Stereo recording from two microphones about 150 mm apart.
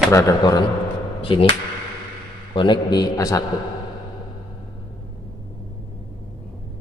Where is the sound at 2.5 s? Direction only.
30° left (ahead or behind).